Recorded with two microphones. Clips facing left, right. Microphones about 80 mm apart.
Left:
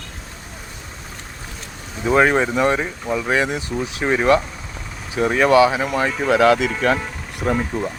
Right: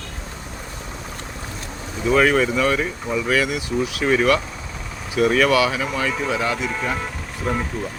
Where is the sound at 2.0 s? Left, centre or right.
Left.